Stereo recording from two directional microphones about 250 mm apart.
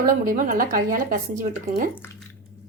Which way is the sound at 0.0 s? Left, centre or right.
Right.